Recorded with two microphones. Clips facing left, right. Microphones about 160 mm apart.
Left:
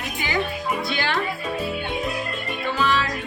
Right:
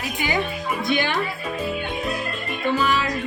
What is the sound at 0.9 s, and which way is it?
Speech, 20° right (ahead or behind).